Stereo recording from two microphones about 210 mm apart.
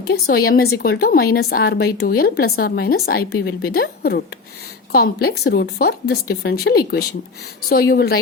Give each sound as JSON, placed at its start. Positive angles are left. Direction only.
{"t": 0.1, "sound": "a woman's voice", "side_deg": 50}